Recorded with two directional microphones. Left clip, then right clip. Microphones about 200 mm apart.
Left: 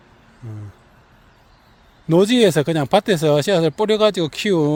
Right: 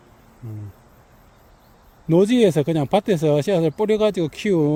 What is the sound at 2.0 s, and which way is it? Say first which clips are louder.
Speech: left 2 dB; 5° right (ahead or behind).